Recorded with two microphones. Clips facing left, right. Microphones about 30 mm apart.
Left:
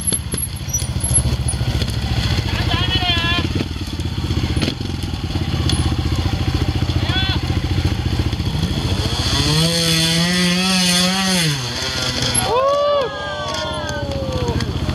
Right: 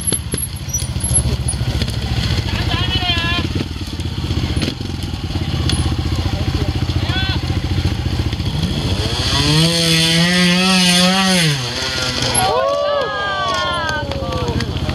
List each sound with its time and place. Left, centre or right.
2.2 s vehicle: centre
4.4 s motorcycle: centre
6.6 s vehicle: centre
8.5 s vehicle: centre
12.4 s a sound: centre
12.6 s run: centre
13.0 s run: right
13.7 s a sound: right